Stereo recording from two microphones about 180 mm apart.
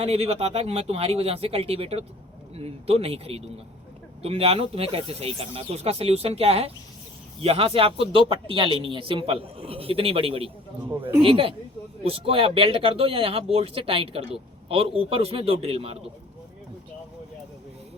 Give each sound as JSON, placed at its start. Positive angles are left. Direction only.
{"t": 0.0, "sound": "speech", "side_deg": -35}